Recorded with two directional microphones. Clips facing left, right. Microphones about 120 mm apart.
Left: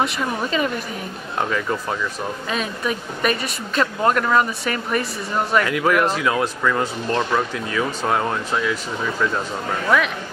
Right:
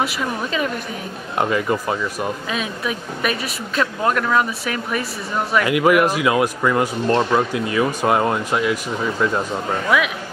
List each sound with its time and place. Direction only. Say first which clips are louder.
0.0 s speech: even; centre (ahead or behind)
9.8 s speech: even; 5° right (ahead or behind)